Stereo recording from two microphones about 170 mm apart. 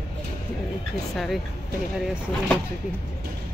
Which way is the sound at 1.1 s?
Centre (ahead or behind).